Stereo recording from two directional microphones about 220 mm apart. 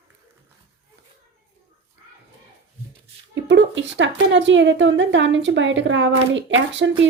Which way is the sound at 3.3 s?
55° right (ahead or behind).